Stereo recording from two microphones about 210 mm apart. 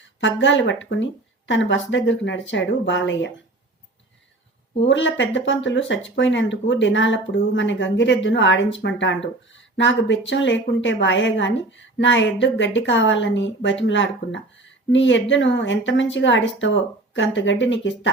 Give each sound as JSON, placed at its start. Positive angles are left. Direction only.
{"t": 0.0, "sound": "speech", "side_deg": 60}
{"t": 4.9, "sound": "speech", "side_deg": 60}